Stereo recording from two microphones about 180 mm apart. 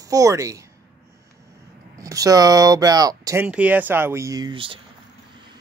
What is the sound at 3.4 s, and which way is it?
Speech, 10° right (ahead or behind).